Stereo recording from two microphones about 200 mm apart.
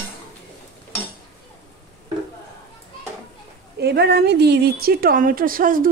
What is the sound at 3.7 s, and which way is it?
Speech, 55° right (ahead or behind).